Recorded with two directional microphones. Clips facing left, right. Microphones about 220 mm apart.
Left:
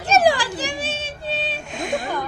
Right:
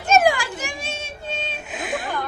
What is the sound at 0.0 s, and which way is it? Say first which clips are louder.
Children playing: even; 35° left (ahead or behind).